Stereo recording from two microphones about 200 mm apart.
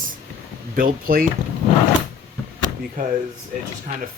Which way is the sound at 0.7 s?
45° right (ahead or behind).